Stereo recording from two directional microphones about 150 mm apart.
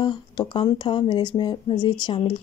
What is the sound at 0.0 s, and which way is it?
Speech, 30° left (ahead or behind).